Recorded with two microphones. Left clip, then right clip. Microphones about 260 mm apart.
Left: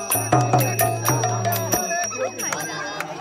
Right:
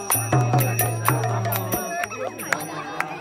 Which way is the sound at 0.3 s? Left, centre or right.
Left.